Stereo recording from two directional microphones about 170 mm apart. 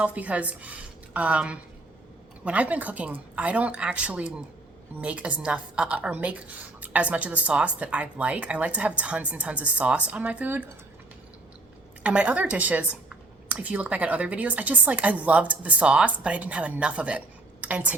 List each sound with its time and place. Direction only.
0.0 s a woman's voice: 10° right (ahead or behind)
12.0 s a woman's voice: 5° right (ahead or behind)